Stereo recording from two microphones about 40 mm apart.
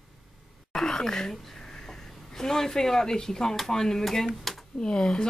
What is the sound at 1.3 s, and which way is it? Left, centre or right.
Speech, centre.